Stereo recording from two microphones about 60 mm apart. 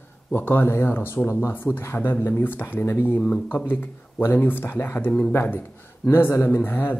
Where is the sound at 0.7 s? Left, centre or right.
Left.